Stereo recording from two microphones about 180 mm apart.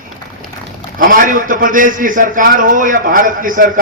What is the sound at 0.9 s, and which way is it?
A man's voice, 50° right (ahead or behind).